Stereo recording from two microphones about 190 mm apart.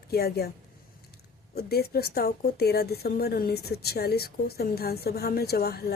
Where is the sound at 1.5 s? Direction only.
55° left (ahead or behind).